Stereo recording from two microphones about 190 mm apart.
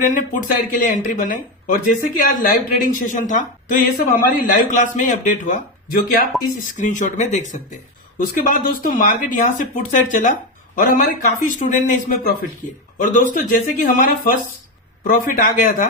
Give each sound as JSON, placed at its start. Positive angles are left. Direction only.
{"t": 0.0, "sound": "speech", "side_deg": 45}
{"t": 15.1, "sound": "speech", "side_deg": 45}